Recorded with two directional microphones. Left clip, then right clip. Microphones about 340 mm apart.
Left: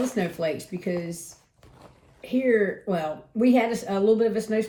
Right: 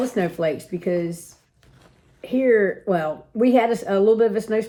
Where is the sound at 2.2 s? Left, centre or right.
Right.